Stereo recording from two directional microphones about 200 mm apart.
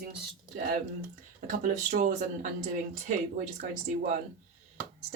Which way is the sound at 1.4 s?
40° right (ahead or behind).